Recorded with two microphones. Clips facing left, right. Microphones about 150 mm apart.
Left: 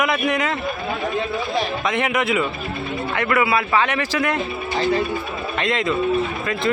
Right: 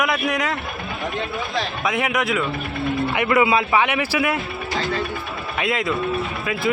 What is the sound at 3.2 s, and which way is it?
Speech, 20° right (ahead or behind).